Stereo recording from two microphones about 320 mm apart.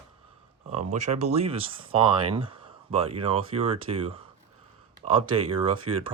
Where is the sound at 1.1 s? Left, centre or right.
Centre.